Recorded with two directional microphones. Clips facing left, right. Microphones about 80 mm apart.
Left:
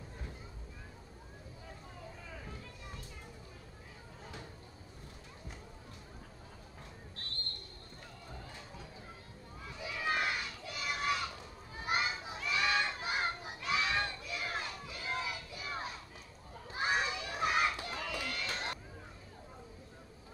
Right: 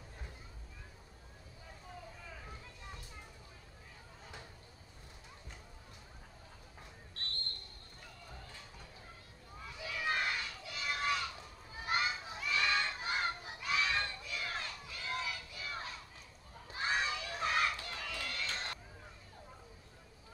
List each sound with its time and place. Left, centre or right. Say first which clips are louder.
9.8 s crowd: left 2 dB; centre
11.8 s children playing: left 1 dB; left
12.4 s a sound: left 1 dB; centre